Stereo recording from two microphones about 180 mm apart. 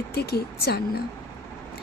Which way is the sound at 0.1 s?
60° left (ahead or behind).